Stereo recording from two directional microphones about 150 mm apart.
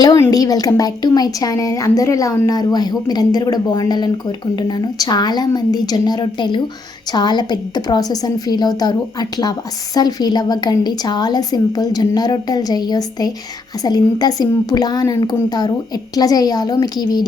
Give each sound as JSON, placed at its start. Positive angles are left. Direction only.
{"t": 0.0, "sound": "a woman's voice", "side_deg": 25}